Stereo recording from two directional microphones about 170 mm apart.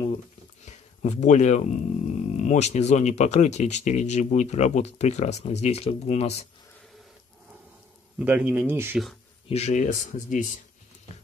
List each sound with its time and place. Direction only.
0.7 s speech: 40° left (ahead or behind)
8.2 s speech: 10° right (ahead or behind)
9.5 s speech: 45° left (ahead or behind)